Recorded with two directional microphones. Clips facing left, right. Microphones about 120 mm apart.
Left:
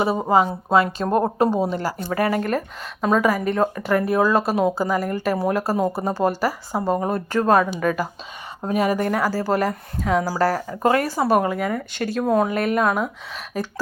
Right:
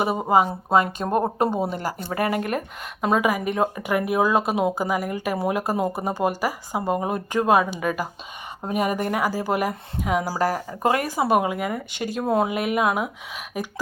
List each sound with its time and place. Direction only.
0.0 s speech: 15° right (ahead or behind)
9.0 s speech: 15° right (ahead or behind)